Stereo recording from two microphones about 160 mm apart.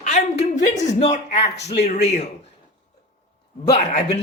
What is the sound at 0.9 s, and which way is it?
Speech, 45° left (ahead or behind).